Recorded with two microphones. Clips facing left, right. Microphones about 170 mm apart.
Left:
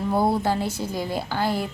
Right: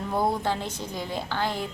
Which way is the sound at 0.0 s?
5° left (ahead or behind).